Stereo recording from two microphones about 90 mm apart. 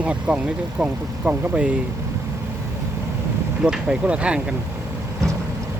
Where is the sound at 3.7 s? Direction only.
10° right (ahead or behind).